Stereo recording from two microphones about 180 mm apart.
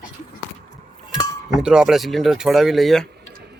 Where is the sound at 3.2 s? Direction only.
65° right (ahead or behind).